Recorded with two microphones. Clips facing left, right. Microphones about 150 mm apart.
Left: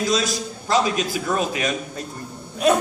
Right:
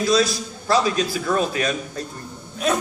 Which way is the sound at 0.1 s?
20° left (ahead or behind).